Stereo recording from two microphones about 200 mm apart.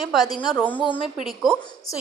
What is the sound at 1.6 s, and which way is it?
Speech, 20° left (ahead or behind).